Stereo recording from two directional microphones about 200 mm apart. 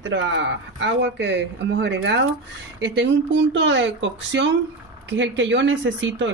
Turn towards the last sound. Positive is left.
turn(degrees=-65)  # may be behind; listen again after turning